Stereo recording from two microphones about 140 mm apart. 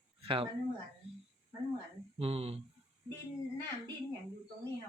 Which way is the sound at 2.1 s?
45° right (ahead or behind).